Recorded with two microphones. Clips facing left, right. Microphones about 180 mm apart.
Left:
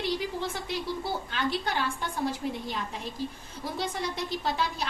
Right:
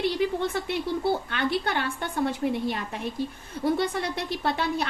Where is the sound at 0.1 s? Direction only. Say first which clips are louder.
Right 5 dB; 60° right (ahead or behind).